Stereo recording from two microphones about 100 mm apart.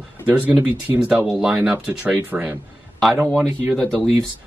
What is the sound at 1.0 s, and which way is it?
Speech, 5° right (ahead or behind).